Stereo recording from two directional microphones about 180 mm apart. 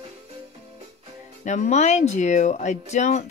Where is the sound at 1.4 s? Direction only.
40° left (ahead or behind).